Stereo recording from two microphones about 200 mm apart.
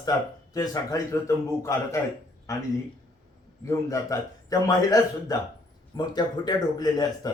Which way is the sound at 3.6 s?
15° left (ahead or behind).